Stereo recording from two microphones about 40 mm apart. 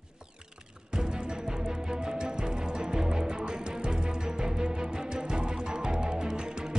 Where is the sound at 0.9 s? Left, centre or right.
Centre.